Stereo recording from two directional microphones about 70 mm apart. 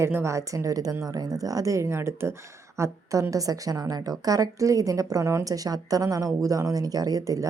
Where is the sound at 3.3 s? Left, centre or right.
Right.